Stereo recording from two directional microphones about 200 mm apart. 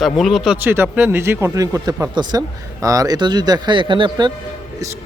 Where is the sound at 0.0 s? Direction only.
Centre (ahead or behind); by 4.3 s 25° right (ahead or behind).